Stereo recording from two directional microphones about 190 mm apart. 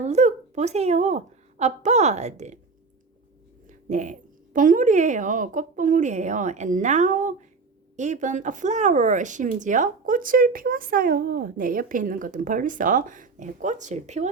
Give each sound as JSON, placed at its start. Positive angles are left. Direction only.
{"t": 0.0, "sound": "a woman's voice", "side_deg": -40}
{"t": 3.7, "sound": "a woman's voice", "side_deg": -40}